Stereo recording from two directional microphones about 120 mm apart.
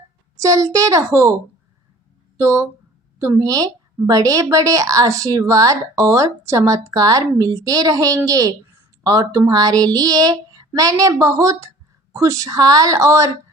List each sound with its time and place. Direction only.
0.3 s a woman's voice: 25° right (ahead or behind)
2.4 s a woman's voice: 25° right (ahead or behind)
9.5 s a sound: 30° right (ahead or behind)
10.8 s a woman's voice: 30° right (ahead or behind)